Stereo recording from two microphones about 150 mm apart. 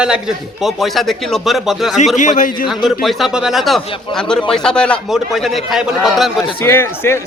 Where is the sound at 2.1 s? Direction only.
55° left (ahead or behind).